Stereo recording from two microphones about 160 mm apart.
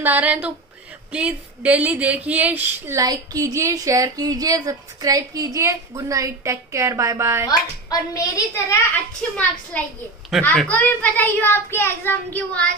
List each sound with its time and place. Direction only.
0.0 s speech: 10° right (ahead or behind)
7.4 s a woman's voice: 20° left (ahead or behind)
9.7 s a child's voice: 10° left (ahead or behind)